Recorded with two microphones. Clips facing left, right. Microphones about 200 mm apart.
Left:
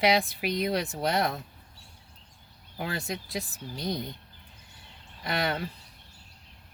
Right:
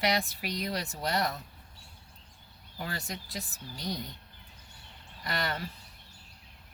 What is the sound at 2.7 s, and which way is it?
Speech, 60° left (ahead or behind).